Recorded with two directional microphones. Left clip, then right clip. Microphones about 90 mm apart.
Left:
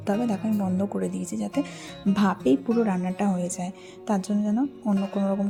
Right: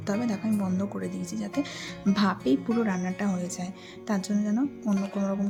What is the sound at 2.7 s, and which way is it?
Music, 15° left (ahead or behind).